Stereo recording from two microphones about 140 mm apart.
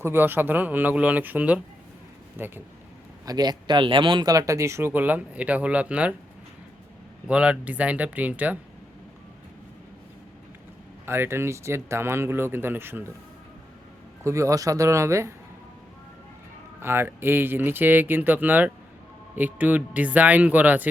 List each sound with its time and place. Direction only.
0.0 s speech: 15° right (ahead or behind)
3.2 s speech: 30° right (ahead or behind); by 6.1 s 10° right (ahead or behind)
7.3 s speech: 10° right (ahead or behind)
11.0 s speech: 15° right (ahead or behind)
14.3 s speech: 20° right (ahead or behind)
16.8 s speech: 15° right (ahead or behind)